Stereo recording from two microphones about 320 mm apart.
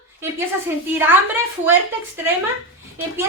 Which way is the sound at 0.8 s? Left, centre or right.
Centre.